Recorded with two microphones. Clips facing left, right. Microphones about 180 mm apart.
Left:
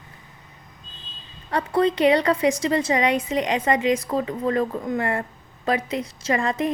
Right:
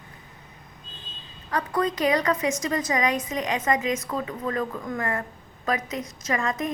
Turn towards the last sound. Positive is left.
turn(degrees=30)  # may be behind; listen again after turning